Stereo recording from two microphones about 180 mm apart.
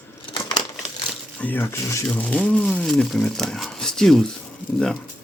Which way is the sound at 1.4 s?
10° left (ahead or behind).